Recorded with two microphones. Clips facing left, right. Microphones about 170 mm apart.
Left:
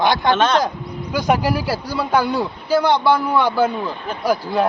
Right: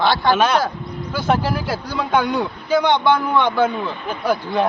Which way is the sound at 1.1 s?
15° left (ahead or behind).